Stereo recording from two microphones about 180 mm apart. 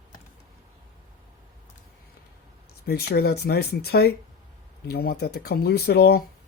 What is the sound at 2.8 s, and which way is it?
Speech, 60° left (ahead or behind).